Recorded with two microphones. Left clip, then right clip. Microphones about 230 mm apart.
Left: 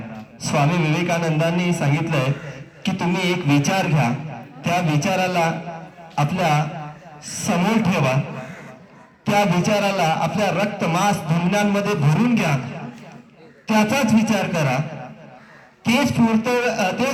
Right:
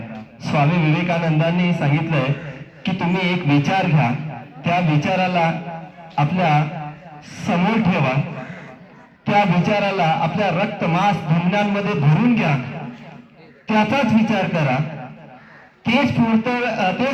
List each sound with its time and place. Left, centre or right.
0.4 s a man's voice: left
9.2 s a man's voice: left
15.8 s a man's voice: left